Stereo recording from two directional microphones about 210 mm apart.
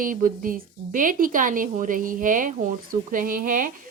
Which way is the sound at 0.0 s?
40° right (ahead or behind).